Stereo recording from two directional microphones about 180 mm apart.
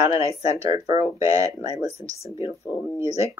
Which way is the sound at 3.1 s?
35° left (ahead or behind).